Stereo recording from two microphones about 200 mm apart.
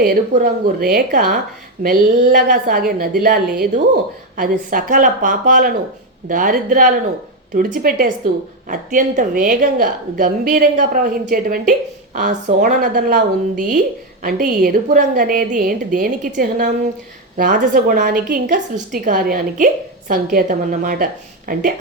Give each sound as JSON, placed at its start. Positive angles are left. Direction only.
{"t": 0.0, "sound": "a woman's voice", "side_deg": -45}